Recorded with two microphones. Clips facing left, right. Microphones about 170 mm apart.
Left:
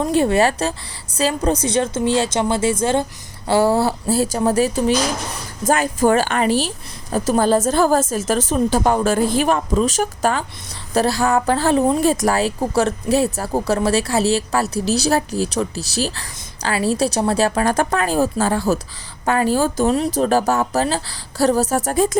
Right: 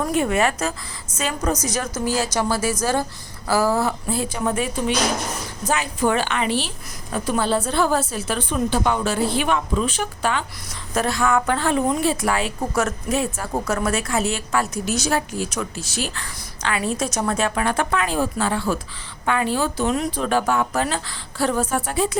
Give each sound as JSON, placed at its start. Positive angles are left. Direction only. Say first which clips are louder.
{"t": 0.0, "sound": "a woman's voice", "louder": "left 4 dB", "side_deg": 30}